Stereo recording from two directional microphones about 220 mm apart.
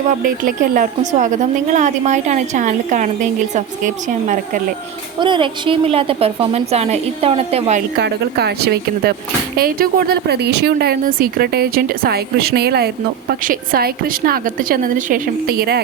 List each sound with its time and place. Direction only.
0.2 s a woman's voice: 40° right (ahead or behind)
5.2 s a woman's voice: 20° right (ahead or behind)
7.9 s a woman's voice: 50° right (ahead or behind)